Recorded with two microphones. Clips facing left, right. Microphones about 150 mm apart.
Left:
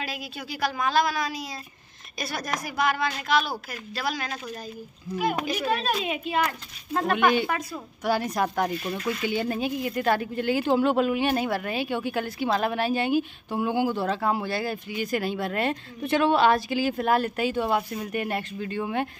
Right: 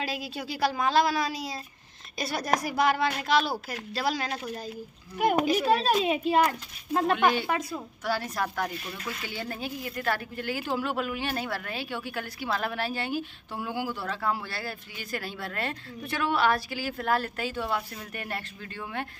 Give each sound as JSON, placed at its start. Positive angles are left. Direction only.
{"t": 0.0, "sound": "a woman's voice", "side_deg": -30}
{"t": 5.5, "sound": "a woman's voice", "side_deg": -35}
{"t": 6.4, "sound": "speech", "side_deg": -10}
{"t": 7.2, "sound": "a woman's voice", "side_deg": 15}